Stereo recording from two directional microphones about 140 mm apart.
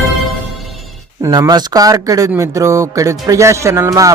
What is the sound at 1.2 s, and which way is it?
Speech, 25° right (ahead or behind).